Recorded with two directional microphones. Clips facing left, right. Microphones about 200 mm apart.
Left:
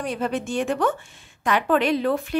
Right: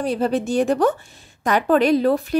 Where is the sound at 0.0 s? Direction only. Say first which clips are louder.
Right 5 dB; 35° right (ahead or behind).